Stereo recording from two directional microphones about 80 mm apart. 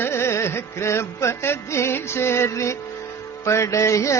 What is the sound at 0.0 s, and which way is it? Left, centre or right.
Music, left.